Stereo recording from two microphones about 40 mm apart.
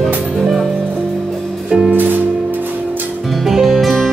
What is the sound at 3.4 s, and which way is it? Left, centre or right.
Music, centre.